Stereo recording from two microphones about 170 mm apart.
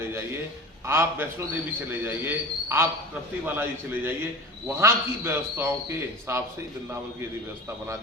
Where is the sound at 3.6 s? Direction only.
10° right (ahead or behind).